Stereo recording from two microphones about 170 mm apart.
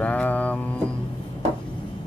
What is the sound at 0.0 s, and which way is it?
Mantra, 10° left (ahead or behind).